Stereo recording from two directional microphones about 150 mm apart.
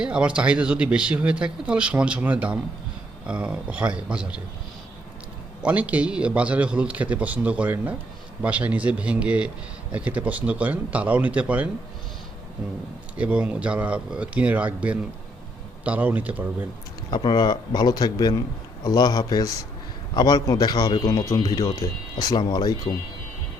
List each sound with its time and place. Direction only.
0.0 s speech: 5° right (ahead or behind)
5.6 s speech: 10° right (ahead or behind)
13.1 s speech: 10° right (ahead or behind)
17.1 s a man's voice: 30° left (ahead or behind)